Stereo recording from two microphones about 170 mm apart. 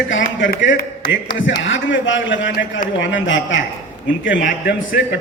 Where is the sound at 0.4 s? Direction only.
90° left.